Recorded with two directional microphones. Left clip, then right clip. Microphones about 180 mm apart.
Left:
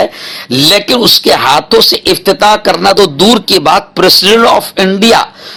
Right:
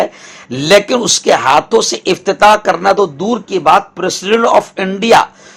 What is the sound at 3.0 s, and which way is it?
A man's voice, 45° left (ahead or behind).